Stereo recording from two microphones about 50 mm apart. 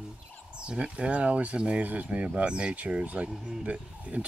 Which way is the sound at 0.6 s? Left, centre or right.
Right.